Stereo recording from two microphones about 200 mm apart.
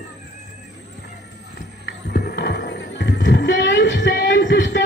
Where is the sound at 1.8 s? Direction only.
55° left (ahead or behind).